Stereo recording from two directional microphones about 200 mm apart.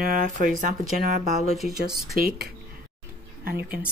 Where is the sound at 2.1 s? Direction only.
45° right (ahead or behind).